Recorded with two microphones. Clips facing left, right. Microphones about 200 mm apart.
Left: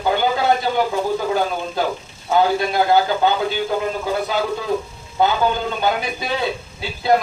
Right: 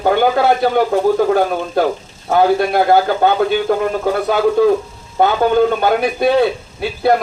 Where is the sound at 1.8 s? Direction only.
65° right (ahead or behind).